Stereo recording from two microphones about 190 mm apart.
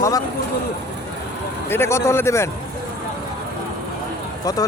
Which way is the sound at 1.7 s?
15° left (ahead or behind).